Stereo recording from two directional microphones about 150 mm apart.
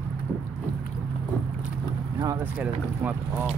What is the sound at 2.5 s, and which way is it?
Speech, 10° right (ahead or behind).